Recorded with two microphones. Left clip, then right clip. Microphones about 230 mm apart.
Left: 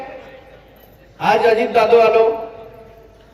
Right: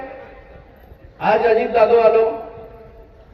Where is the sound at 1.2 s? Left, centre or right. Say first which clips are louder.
Left 1 dB; left.